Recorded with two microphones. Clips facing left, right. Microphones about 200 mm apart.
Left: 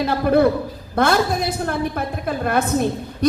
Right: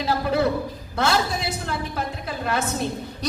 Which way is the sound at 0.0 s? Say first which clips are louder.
Left 6 dB; 55° left (ahead or behind).